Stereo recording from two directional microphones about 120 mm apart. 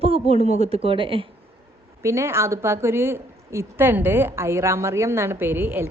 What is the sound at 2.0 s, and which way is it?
A woman's voice, 25° right (ahead or behind).